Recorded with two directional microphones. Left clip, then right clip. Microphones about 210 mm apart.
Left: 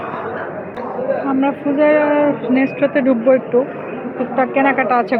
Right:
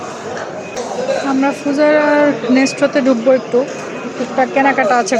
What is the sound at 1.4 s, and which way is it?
Speech, 25° right (ahead or behind).